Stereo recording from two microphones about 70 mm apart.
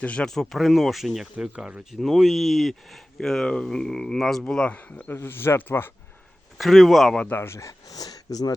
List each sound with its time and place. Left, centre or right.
0.0 s speech: centre
0.3 s speech: centre
1.4 s speech: centre
1.9 s speech: centre
5.0 s speech: left
6.6 s speech: centre
7.3 s speech: left